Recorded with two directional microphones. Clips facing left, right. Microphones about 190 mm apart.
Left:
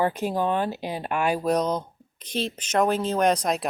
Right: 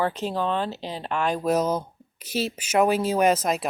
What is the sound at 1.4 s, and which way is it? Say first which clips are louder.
Speech: right 1 dB; 5° right (ahead or behind).